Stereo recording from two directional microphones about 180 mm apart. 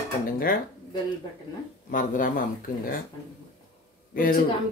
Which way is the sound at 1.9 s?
50° left (ahead or behind).